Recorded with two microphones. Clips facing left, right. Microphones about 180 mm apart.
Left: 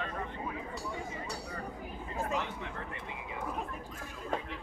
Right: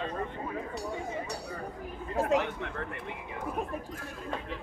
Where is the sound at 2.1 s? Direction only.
65° right (ahead or behind).